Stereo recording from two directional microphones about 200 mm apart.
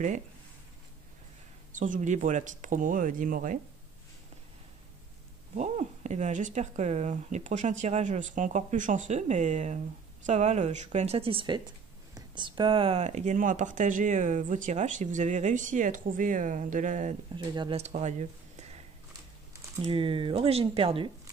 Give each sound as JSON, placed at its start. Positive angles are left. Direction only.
{"t": 1.7, "sound": "speech", "side_deg": -40}
{"t": 5.6, "sound": "speech", "side_deg": -35}
{"t": 17.4, "sound": "speech", "side_deg": -25}
{"t": 19.7, "sound": "speech", "side_deg": -25}